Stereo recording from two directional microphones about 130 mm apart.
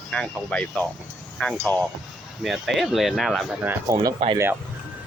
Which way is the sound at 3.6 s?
20° right (ahead or behind).